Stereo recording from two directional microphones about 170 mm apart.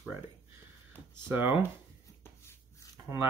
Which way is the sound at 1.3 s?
10° right (ahead or behind).